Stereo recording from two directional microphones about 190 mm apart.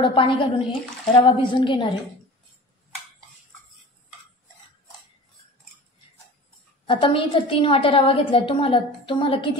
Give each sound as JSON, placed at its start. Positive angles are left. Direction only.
{"t": 0.0, "sound": "a woman's voice", "side_deg": 25}
{"t": 6.9, "sound": "a woman's voice", "side_deg": 30}